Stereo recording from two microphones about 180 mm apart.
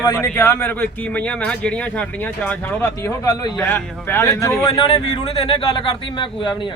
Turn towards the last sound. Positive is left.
turn(degrees=25)  # may be behind; listen again after turning